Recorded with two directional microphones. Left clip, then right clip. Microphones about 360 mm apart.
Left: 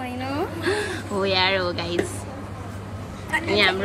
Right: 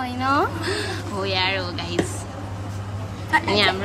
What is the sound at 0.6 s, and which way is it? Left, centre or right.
Speech, centre.